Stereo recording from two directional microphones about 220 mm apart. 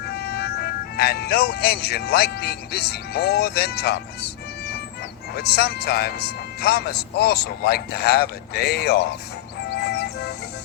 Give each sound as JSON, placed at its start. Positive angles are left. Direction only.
{"t": 0.2, "sound": "speech", "side_deg": 45}
{"t": 5.3, "sound": "a man's voice", "side_deg": 45}
{"t": 9.6, "sound": "music", "side_deg": 45}